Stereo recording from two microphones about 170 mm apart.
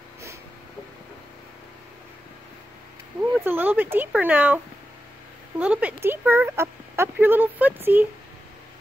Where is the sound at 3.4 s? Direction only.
10° right (ahead or behind).